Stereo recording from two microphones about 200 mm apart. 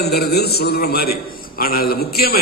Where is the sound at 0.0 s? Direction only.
50° left (ahead or behind).